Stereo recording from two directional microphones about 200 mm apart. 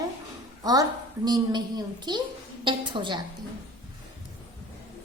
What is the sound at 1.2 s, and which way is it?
A woman's voice, 20° right (ahead or behind).